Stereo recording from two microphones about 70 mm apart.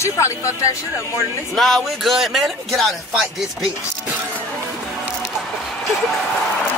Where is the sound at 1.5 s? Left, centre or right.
Centre.